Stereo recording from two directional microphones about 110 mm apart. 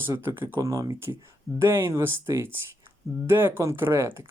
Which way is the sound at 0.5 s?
30° right (ahead or behind).